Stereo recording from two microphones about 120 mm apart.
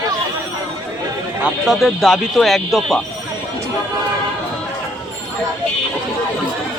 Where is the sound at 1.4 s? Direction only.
Centre (ahead or behind).